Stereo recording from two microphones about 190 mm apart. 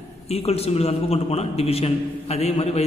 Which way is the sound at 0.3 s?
35° left (ahead or behind).